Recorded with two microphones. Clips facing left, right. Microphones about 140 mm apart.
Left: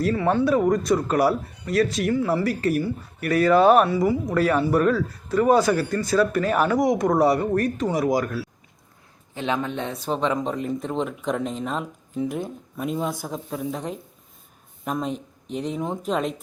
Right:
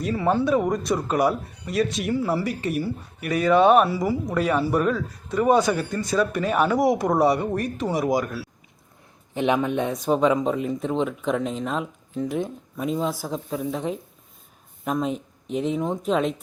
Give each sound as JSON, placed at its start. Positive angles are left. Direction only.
{"t": 0.4, "sound": "speech", "side_deg": 0}
{"t": 9.3, "sound": "a man's voice", "side_deg": -20}